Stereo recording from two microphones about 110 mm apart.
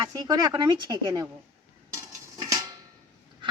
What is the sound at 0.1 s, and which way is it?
Speech, 35° right (ahead or behind).